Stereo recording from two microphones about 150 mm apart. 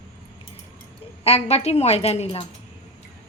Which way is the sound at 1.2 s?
45° left (ahead or behind).